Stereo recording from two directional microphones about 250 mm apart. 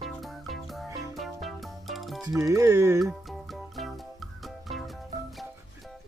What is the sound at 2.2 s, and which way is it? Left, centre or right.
Speech, centre.